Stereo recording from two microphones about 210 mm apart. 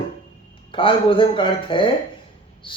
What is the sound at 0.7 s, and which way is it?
Speech, 25° left (ahead or behind).